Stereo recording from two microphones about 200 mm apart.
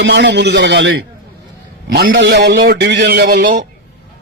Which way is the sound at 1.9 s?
60° right (ahead or behind).